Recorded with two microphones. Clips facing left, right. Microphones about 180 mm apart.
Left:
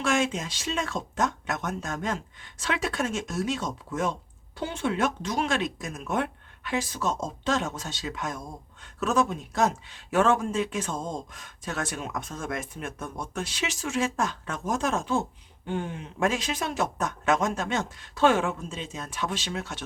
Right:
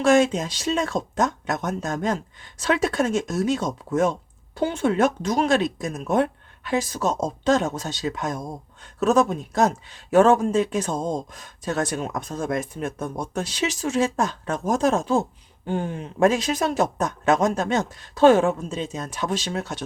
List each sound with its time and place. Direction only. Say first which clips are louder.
0.0 s speech: right 8 dB; 40° right (ahead or behind)